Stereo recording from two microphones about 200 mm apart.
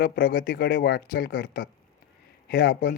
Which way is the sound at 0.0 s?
45° left (ahead or behind).